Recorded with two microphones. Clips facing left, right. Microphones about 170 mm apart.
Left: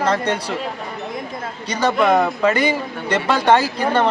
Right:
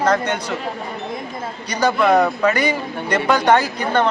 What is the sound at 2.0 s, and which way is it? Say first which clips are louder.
Speech: right 1 dB; centre (ahead or behind).